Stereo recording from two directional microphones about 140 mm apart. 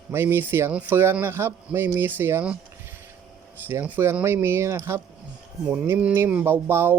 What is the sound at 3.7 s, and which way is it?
Speech, 15° right (ahead or behind).